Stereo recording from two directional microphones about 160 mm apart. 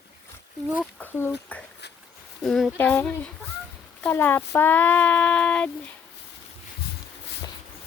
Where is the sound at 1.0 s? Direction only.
10° left (ahead or behind).